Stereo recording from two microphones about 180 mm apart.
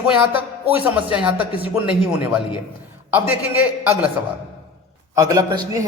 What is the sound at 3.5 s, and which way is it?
Speech, 10° right (ahead or behind).